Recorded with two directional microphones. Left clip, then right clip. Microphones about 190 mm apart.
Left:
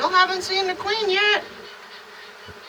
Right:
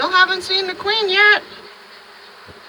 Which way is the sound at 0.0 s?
35° right (ahead or behind).